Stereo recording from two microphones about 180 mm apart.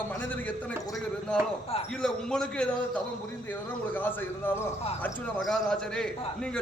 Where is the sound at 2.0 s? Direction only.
5° left (ahead or behind).